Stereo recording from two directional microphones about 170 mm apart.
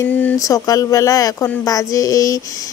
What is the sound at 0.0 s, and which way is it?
A woman's voice, 10° left (ahead or behind).